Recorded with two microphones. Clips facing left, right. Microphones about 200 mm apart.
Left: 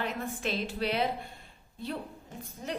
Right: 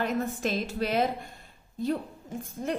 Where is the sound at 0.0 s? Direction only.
45° right (ahead or behind).